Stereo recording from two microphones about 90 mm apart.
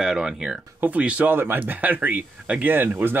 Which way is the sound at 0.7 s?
15° right (ahead or behind).